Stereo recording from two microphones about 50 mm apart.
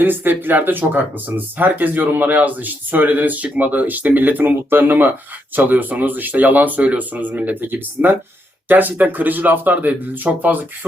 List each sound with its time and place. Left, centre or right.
0.0 s speech: right